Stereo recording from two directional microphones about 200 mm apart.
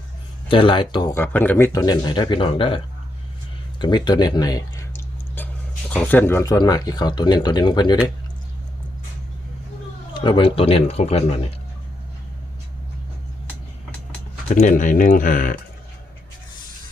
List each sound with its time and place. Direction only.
0.4 s speech: 25° left (ahead or behind)
1.1 s speech: 10° left (ahead or behind); by 2.8 s 25° left (ahead or behind)
3.8 s clicking: 20° left (ahead or behind)
5.9 s speech: 10° left (ahead or behind)
10.2 s speech: 25° left (ahead or behind)
14.5 s speech: 40° left (ahead or behind)